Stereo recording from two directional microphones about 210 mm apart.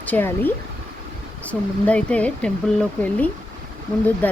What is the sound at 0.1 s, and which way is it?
Speech, 10° left (ahead or behind).